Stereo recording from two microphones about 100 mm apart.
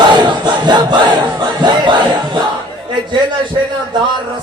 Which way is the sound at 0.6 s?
45° right (ahead or behind).